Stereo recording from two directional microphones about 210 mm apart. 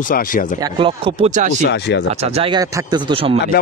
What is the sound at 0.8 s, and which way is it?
Speech, 25° right (ahead or behind).